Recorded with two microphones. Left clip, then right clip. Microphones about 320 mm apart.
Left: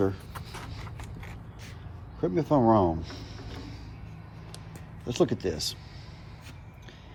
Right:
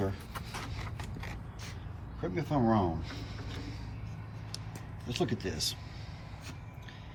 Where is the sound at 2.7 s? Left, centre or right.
Centre.